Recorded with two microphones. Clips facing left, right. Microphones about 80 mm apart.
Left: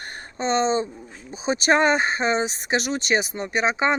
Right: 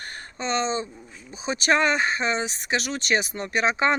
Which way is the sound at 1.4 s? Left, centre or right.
Centre.